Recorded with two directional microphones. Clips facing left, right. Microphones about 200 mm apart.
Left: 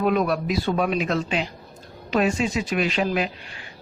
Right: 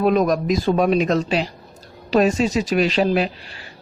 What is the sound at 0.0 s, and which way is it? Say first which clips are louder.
Speech: right 4 dB; 40° right (ahead or behind).